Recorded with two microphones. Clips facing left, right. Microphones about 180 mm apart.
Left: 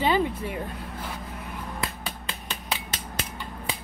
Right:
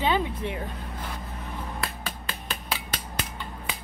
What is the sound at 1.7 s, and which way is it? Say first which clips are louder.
Finger snapping: left 1 dB; 20° left (ahead or behind).